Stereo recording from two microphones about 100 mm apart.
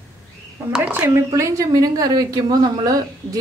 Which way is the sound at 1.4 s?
35° right (ahead or behind).